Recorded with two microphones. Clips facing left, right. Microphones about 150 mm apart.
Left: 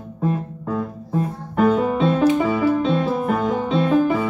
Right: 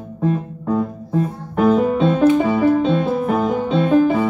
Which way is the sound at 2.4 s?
45° right (ahead or behind).